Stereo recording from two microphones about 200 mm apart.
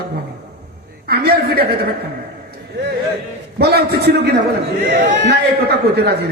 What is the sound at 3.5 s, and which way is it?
Speech, 55° right (ahead or behind).